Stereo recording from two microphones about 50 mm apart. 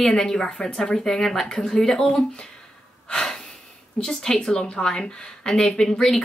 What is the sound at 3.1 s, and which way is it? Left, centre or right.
Breathing, centre.